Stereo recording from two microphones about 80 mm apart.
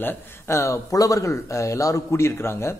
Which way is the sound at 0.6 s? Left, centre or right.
Left.